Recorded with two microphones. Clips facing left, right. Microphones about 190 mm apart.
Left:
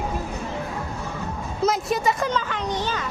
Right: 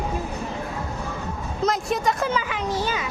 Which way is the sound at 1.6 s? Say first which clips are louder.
Left 1 dB; 5° left (ahead or behind).